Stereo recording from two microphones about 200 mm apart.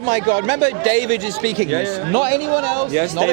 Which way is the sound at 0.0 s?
25° right (ahead or behind).